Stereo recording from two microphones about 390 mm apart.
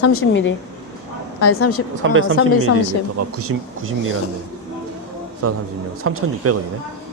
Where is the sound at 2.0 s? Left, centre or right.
Right.